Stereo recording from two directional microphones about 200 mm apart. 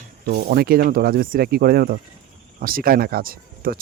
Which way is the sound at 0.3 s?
50° right (ahead or behind).